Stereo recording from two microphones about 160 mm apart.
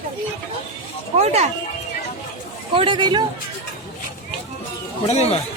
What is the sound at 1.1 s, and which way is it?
Speech, 40° right (ahead or behind).